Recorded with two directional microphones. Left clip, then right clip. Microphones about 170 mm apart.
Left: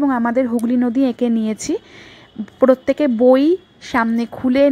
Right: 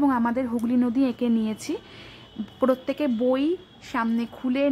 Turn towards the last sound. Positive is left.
turn(degrees=35)  # may be behind; listen again after turning